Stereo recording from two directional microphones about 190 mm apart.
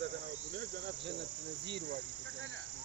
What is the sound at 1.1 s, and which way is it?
Cricket, 65° right (ahead or behind).